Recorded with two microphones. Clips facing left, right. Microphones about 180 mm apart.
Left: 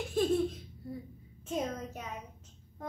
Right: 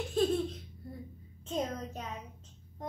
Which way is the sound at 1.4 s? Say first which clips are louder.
Even; 10° left (ahead or behind).